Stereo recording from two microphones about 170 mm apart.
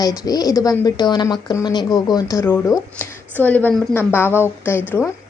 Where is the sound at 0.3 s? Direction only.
20° left (ahead or behind).